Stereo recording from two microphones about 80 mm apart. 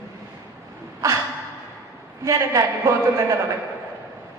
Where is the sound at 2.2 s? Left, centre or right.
Right.